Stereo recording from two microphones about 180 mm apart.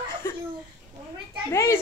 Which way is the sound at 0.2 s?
15° left (ahead or behind).